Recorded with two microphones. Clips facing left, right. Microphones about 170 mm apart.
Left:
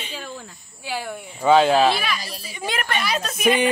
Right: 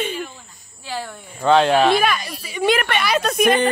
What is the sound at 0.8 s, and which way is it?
Speech, 10° left (ahead or behind).